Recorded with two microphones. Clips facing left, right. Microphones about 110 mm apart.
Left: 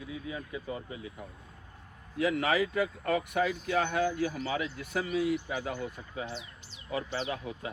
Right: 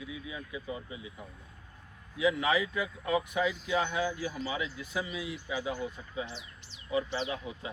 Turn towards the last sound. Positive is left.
turn(degrees=50)  # may be behind; listen again after turning